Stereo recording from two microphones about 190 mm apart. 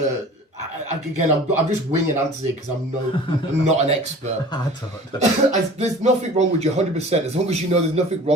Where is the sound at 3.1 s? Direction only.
25° left (ahead or behind).